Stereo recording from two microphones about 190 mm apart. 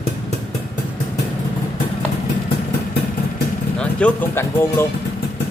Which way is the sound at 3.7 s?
10° left (ahead or behind).